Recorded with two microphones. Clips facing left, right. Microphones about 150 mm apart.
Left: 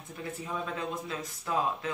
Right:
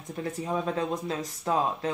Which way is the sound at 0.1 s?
40° right (ahead or behind).